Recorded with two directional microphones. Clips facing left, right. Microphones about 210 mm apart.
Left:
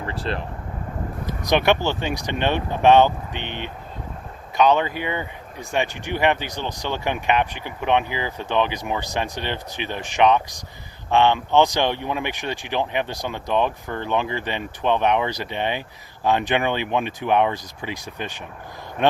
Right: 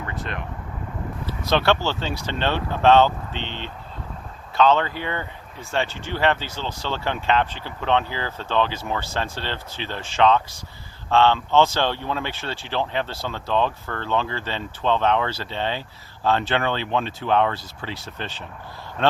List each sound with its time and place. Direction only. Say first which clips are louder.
0.0 s speech: left 4 dB; 30° left (ahead or behind)
1.3 s speech: left 1 dB; 15° left (ahead or behind)